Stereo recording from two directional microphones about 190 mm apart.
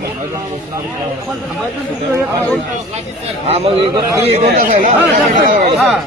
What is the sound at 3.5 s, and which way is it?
A man's voice, 35° right (ahead or behind).